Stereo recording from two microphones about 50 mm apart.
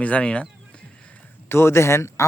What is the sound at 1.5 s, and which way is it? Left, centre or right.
Speech, left.